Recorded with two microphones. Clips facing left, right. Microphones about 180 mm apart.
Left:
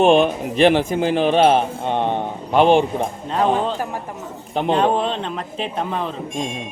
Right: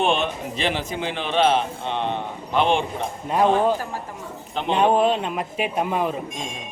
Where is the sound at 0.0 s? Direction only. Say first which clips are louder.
Left 8 dB; 45° left (ahead or behind).